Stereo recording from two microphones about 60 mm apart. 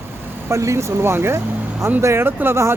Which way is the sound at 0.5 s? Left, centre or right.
Right.